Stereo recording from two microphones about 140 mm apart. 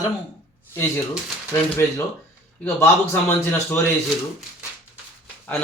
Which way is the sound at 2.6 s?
15° left (ahead or behind).